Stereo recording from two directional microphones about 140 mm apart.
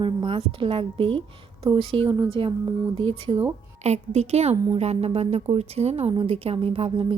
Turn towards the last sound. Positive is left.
turn(degrees=-40)  # may be behind; listen again after turning